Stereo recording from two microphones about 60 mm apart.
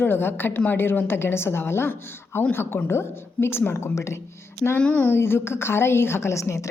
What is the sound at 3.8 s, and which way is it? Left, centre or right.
Speech, left.